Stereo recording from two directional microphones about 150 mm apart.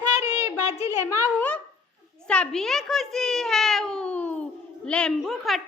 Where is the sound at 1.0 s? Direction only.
15° left (ahead or behind).